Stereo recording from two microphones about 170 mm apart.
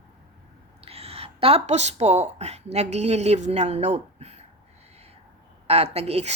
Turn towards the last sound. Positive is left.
turn(degrees=-35)  # may be behind; listen again after turning